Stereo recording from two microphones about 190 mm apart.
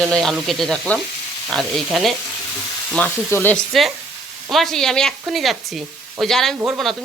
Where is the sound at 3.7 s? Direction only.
Centre (ahead or behind).